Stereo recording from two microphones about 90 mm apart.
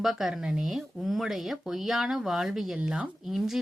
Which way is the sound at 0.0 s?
5° right (ahead or behind).